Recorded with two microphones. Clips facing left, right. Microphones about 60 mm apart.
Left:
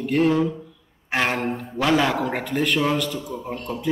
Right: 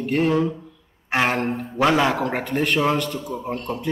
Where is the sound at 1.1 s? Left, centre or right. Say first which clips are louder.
Right 2 dB; centre.